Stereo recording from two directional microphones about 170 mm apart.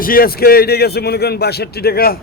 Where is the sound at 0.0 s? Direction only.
60° left (ahead or behind).